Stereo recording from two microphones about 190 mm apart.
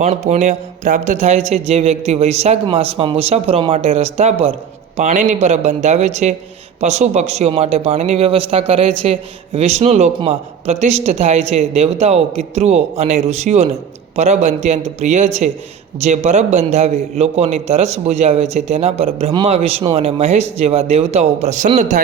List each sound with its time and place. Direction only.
0.0 s a man's voice: 35° right (ahead or behind)